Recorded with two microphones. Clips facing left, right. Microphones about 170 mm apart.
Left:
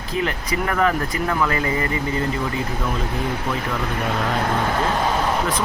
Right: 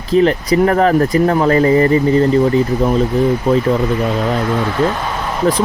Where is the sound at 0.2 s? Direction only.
35° right (ahead or behind).